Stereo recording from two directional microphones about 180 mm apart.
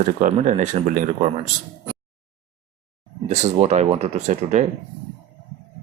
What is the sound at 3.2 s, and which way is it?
Speech, 40° right (ahead or behind).